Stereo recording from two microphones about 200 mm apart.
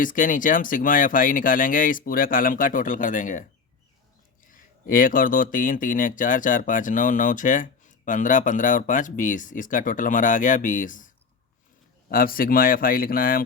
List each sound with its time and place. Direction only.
0.0 s speech: 40° left (ahead or behind)
4.9 s speech: 45° left (ahead or behind)